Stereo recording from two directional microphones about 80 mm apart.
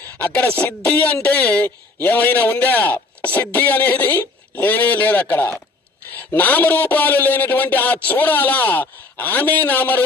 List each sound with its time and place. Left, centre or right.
0.3 s a man's voice: centre